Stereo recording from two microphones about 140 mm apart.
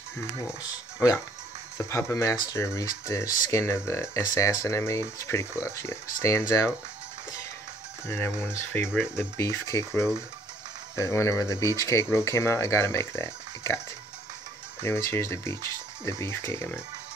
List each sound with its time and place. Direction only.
1.8 s speech: 20° left (ahead or behind)
8.1 s speech: 15° left (ahead or behind)
14.8 s speech: 20° left (ahead or behind)